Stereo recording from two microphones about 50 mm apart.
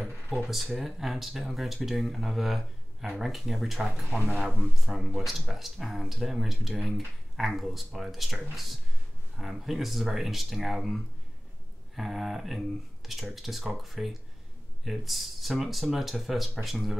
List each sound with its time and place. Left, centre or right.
0.4 s speech: centre
4.2 s speech: right
4.6 s speech: centre